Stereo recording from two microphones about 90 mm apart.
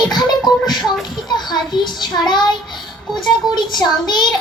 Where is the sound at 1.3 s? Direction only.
50° left (ahead or behind).